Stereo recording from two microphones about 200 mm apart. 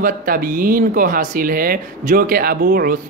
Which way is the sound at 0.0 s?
45° right (ahead or behind).